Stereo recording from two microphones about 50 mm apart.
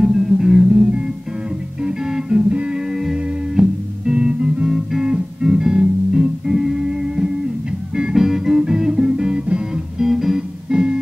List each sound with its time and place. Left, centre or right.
0.0 s music: centre
3.0 s music: centre
4.6 s guitar: centre
5.0 s music: centre